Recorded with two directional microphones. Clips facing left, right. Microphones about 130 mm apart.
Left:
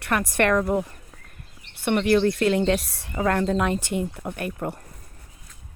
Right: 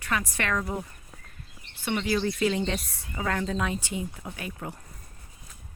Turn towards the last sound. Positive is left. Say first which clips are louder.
# left 8 dB
turn(degrees=60)  # may be behind; listen again after turning